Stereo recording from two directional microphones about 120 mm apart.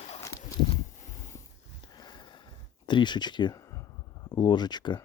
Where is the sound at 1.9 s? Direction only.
35° left (ahead or behind).